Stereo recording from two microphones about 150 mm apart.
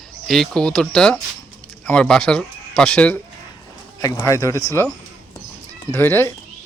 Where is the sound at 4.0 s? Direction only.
20° left (ahead or behind).